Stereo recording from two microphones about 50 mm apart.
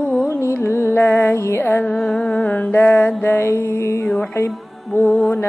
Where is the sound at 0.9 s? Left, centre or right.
Left.